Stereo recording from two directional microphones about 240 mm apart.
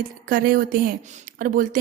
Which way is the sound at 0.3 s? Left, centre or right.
Right.